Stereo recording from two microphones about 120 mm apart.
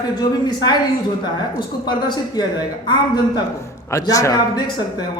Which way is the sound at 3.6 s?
25° left (ahead or behind).